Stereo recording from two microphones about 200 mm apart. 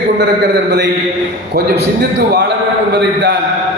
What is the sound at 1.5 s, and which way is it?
Speech, 50° right (ahead or behind).